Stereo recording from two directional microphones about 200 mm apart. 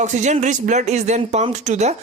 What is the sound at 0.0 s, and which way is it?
Speech, 35° right (ahead or behind).